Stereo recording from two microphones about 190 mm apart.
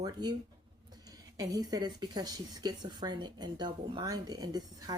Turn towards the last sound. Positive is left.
turn(degrees=-20)  # may be behind; listen again after turning